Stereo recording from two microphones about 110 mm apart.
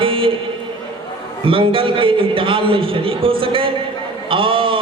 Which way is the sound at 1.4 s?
55° right (ahead or behind).